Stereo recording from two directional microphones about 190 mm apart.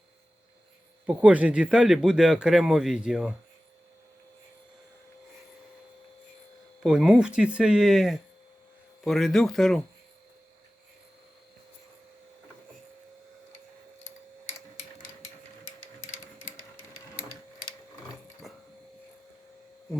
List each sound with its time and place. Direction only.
1.0 s speech: 5° right (ahead or behind)
6.8 s speech: 5° right (ahead or behind)
18.5 s a sound: centre (ahead or behind)